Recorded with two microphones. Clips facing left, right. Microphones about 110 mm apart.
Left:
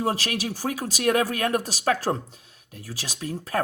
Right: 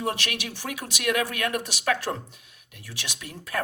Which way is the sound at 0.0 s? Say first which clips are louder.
Left 4 dB; 35° left (ahead or behind).